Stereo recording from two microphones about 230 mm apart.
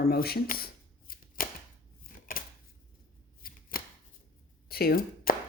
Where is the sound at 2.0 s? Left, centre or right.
Left.